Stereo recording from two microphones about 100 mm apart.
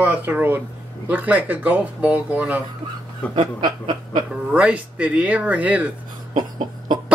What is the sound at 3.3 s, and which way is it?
Snicker, 50° right (ahead or behind).